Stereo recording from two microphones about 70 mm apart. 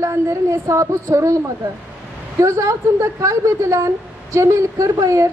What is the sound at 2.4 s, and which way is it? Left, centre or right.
A woman's voice, right.